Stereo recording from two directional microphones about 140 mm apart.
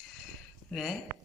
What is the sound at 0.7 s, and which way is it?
Speech, centre (ahead or behind).